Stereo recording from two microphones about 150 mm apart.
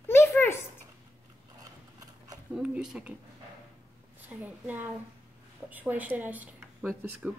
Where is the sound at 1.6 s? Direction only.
25° right (ahead or behind).